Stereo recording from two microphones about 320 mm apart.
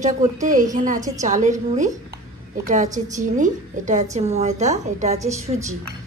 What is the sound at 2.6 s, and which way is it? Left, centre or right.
A woman's voice, right.